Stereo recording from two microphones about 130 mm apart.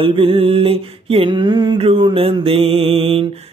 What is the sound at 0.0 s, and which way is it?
Mantra, 45° right (ahead or behind).